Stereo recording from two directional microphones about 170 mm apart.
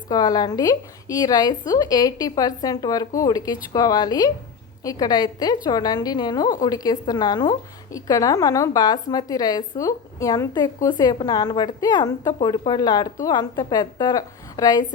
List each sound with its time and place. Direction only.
0.1 s a woman's voice: 25° left (ahead or behind)